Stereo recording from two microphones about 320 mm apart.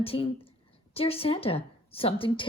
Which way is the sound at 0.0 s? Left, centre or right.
Centre.